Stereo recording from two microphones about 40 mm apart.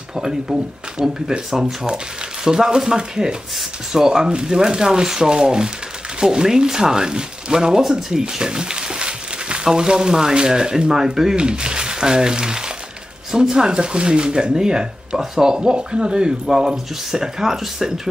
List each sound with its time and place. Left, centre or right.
0.1 s speech: centre